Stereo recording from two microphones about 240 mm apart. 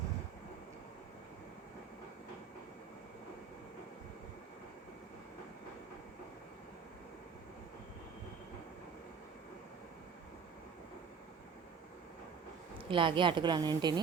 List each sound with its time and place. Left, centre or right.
12.9 s a woman's voice: right